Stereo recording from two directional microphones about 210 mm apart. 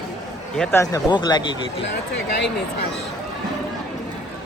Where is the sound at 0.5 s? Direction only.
5° left (ahead or behind).